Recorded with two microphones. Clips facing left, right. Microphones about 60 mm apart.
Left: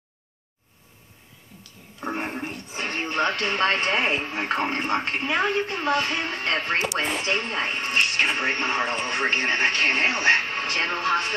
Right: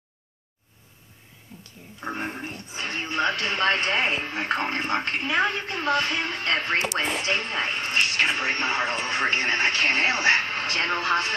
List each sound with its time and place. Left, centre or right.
2.1 s a sound: left
2.7 s television: left
3.4 s a woman's voice: left